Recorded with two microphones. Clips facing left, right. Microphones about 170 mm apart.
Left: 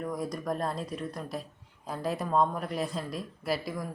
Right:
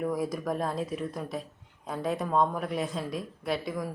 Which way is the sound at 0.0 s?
5° right (ahead or behind).